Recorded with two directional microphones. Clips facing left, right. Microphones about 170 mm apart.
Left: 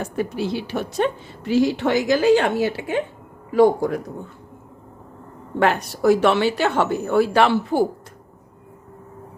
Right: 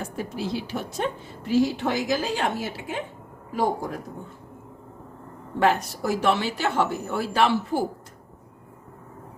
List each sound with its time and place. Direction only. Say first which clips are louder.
0.0 s a woman's voice: left 6 dB; 70° left (ahead or behind)
5.5 s a woman's voice: left 2 dB; 70° left (ahead or behind)